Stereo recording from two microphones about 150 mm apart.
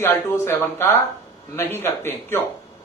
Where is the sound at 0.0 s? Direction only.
15° left (ahead or behind).